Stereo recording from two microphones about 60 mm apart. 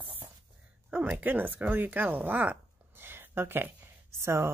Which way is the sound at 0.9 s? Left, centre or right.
Right.